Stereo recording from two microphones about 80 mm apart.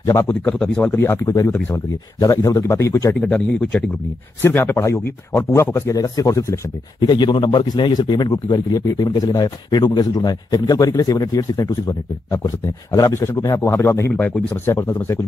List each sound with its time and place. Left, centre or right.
0.0 s speech: left
0.3 s speech: centre
0.9 s speech: left
3.2 s speech: centre
4.4 s speech: left
4.8 s speech: left
7.0 s speech: left
8.7 s speech: left
13.6 s speech: left
14.1 s speech: centre
14.7 s speech: left